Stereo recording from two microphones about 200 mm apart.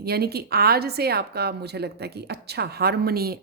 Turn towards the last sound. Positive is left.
turn(degrees=-50)  # may be behind; listen again after turning